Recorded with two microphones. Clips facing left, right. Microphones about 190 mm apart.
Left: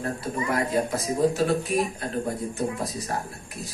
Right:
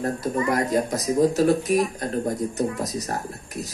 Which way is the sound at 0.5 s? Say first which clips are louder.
Right 1 dB; 40° right (ahead or behind).